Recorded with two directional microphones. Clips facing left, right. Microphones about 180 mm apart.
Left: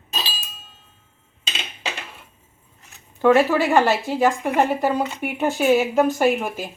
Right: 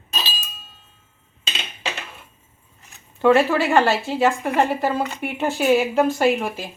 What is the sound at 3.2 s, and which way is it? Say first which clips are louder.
Speech: even; 10° left (ahead or behind).